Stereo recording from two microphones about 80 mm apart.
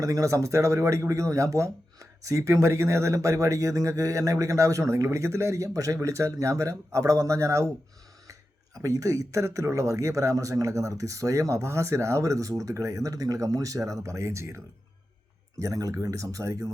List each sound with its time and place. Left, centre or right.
0.0 s speech: right